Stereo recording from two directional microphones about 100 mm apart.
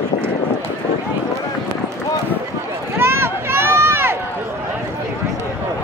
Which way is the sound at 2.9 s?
25° right (ahead or behind).